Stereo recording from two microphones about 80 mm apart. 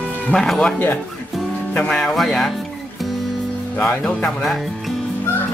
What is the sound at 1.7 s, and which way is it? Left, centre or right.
Speech, centre.